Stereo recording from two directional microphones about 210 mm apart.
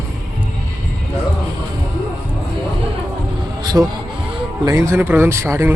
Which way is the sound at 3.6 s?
20° right (ahead or behind).